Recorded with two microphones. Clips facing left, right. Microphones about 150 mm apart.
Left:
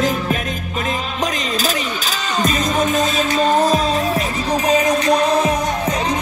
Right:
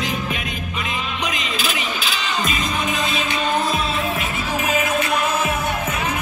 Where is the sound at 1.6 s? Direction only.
45° left (ahead or behind).